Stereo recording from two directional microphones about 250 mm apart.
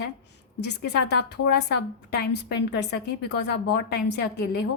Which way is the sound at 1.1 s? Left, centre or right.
Left.